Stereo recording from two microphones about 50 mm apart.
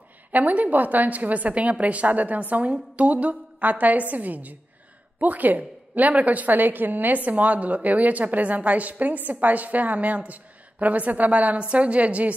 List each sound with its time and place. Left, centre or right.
0.3 s a woman's voice: right